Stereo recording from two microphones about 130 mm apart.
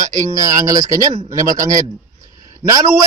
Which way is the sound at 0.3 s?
25° right (ahead or behind).